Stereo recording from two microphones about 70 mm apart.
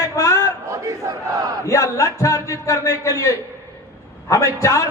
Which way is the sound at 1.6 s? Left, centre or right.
Left.